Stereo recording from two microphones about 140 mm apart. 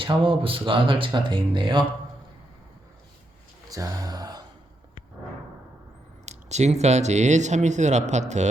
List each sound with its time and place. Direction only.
0.0 s speech: 40° right (ahead or behind)
3.7 s speech: 25° right (ahead or behind)
6.2 s speech: 55° right (ahead or behind)